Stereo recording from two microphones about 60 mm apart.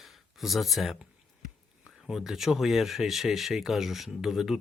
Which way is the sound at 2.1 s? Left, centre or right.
Centre.